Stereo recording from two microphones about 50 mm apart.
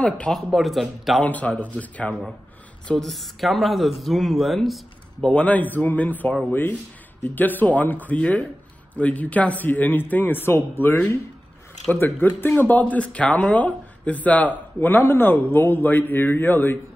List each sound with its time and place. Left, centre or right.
0.3 s speech: centre
1.2 s a man's voice: left
3.0 s speech: centre
5.3 s speech: left
11.9 s speech: left